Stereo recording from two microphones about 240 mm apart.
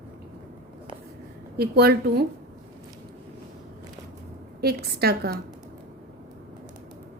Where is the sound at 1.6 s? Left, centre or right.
Right.